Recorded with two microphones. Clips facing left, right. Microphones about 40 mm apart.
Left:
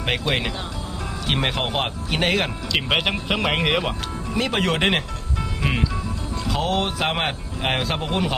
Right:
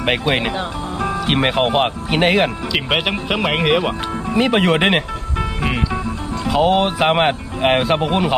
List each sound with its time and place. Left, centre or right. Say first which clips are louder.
0.0 s speech: right 5 dB; centre
2.7 s speech: even; centre
4.3 s speech: right 7 dB; centre
6.4 s speech: right 8 dB; centre